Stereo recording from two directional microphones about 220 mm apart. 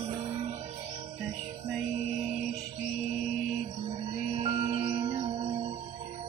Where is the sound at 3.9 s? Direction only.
25° right (ahead or behind).